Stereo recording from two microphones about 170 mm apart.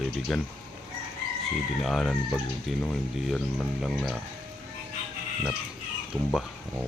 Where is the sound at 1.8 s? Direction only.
5° left (ahead or behind).